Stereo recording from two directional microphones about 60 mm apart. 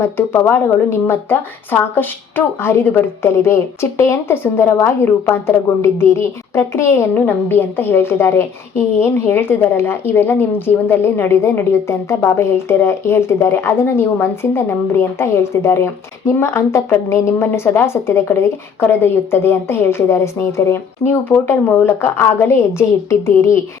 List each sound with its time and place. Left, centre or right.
0.0 s a woman's voice: left
7.1 s a woman's voice: left
21.3 s speech: left
21.8 s a woman's voice: left